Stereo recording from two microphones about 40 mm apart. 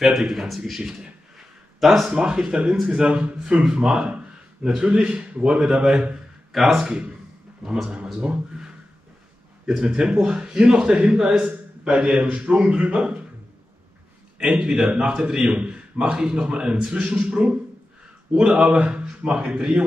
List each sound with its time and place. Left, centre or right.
0.0 s a man's voice: centre
2.0 s speech: centre
3.6 s speech: centre
6.5 s a man's voice: centre
8.2 s speech: right
14.4 s a man's voice: right
18.7 s speech: right